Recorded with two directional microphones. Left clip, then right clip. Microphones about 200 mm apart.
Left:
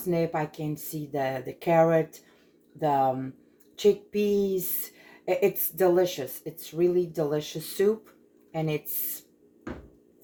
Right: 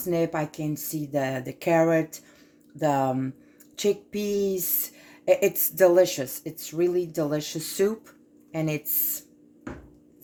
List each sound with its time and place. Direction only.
0.1 s speech: 50° right (ahead or behind)